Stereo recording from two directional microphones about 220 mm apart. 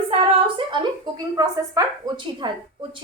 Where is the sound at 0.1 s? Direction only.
20° right (ahead or behind).